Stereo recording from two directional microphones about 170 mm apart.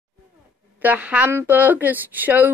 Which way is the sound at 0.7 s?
10° right (ahead or behind).